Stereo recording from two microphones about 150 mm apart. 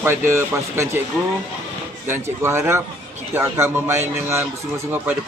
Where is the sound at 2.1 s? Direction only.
15° right (ahead or behind).